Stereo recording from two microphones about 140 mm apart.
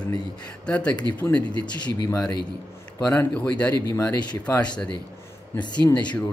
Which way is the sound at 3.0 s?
10° left (ahead or behind).